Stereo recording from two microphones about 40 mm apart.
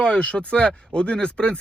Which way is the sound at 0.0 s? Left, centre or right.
Left.